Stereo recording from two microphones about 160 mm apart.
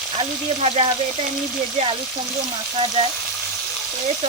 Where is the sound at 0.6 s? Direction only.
40° right (ahead or behind).